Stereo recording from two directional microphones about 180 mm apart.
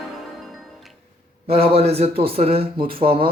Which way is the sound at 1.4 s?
30° right (ahead or behind).